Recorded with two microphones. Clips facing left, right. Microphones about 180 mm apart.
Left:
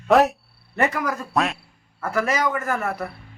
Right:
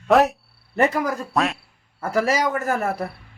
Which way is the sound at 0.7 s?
30° right (ahead or behind).